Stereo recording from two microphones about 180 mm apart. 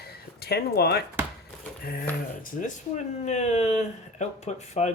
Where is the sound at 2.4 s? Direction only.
40° left (ahead or behind).